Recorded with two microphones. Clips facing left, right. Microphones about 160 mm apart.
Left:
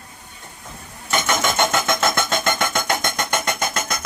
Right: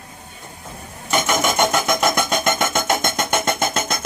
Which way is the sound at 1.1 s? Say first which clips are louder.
Right 2 dB; 15° right (ahead or behind).